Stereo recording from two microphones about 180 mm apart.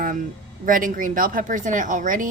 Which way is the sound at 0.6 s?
50° right (ahead or behind).